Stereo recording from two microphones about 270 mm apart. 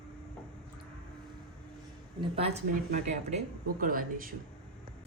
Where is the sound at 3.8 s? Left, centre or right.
Right.